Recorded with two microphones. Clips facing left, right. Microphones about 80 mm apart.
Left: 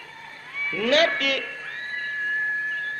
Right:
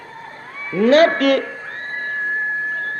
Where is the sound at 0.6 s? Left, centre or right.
Right.